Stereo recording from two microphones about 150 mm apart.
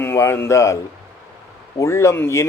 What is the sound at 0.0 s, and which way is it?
Speech, 15° left (ahead or behind).